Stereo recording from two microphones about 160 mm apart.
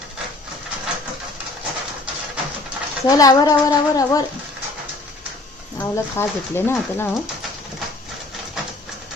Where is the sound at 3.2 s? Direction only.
25° left (ahead or behind).